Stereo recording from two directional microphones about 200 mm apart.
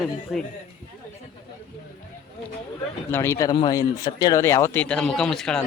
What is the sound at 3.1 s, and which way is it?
Speech, 15° left (ahead or behind).